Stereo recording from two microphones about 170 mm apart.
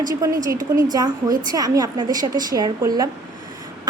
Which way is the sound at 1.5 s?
20° right (ahead or behind).